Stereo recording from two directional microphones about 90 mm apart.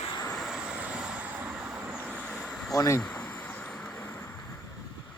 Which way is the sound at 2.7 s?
40° left (ahead or behind).